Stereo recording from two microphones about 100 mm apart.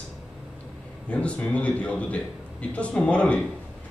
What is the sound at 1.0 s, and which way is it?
Speech, 10° left (ahead or behind).